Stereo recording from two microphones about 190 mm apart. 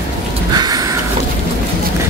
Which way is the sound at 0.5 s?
20° right (ahead or behind).